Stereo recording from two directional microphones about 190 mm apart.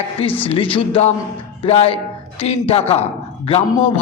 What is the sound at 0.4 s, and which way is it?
A man's voice, 30° left (ahead or behind).